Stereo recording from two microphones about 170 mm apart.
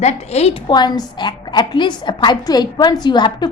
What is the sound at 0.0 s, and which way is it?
Speech, 40° left (ahead or behind).